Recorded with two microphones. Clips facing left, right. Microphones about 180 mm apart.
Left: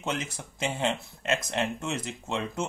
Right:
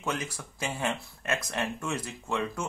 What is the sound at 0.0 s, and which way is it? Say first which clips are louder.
Speech: left 1 dB; 25° left (ahead or behind).